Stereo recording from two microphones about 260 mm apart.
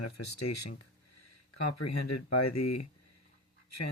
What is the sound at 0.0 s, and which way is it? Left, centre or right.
Speech, left.